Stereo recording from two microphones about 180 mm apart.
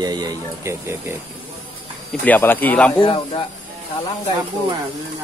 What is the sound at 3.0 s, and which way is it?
Speech, 30° left (ahead or behind).